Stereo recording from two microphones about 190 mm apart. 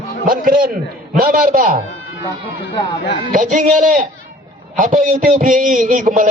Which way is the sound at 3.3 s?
40° right (ahead or behind).